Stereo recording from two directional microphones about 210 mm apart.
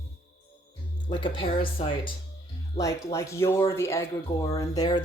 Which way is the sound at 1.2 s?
25° left (ahead or behind).